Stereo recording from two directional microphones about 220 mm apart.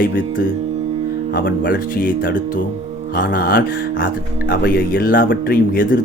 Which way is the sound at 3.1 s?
40° left (ahead or behind).